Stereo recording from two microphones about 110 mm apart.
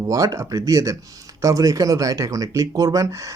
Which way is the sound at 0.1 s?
30° right (ahead or behind).